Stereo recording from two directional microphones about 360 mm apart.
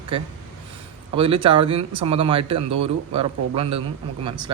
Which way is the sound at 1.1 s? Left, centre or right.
Centre.